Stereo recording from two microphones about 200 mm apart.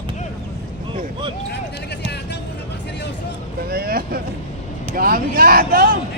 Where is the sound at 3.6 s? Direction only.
50° right (ahead or behind).